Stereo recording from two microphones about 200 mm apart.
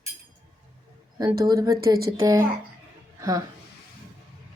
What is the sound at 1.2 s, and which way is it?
A woman's voice, 15° right (ahead or behind).